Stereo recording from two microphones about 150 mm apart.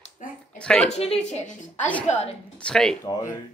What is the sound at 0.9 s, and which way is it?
Speech, 45° left (ahead or behind).